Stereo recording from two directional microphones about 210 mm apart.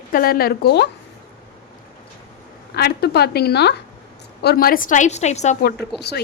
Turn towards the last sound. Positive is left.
turn(degrees=50)  # may be behind; listen again after turning